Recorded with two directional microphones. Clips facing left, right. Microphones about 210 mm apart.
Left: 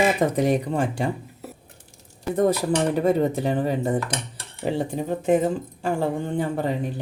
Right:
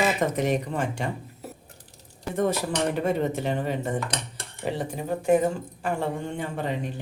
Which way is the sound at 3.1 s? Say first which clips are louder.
Left 4 dB; 35° left (ahead or behind).